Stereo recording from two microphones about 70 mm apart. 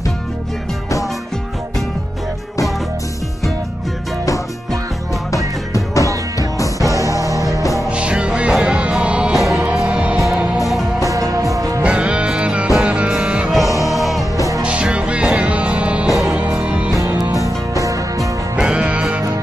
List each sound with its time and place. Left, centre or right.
6.8 s music: right
7.9 s music: centre
9.3 s music: centre
9.8 s music: centre
10.1 s music: centre
11.1 s music: right
11.8 s music: centre
13.7 s music: left
13.9 s music: centre
14.6 s music: centre
16.1 s music: centre
16.5 s music: centre
16.9 s music: right
18.6 s music: centre